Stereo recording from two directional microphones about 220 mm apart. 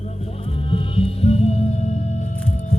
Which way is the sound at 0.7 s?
25° left (ahead or behind).